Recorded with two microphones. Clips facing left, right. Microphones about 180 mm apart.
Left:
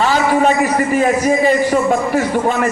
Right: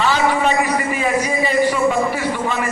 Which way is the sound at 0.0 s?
40° left (ahead or behind).